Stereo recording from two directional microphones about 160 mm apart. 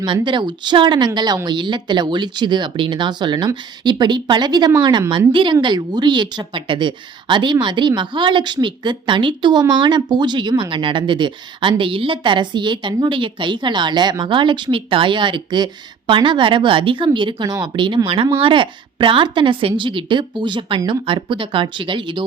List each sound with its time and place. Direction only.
0.0 s a woman's voice: 30° right (ahead or behind)